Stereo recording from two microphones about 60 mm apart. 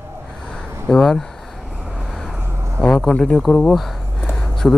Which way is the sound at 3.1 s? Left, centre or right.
Centre.